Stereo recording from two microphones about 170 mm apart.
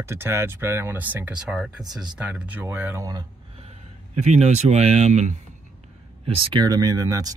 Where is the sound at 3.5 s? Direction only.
40° right (ahead or behind).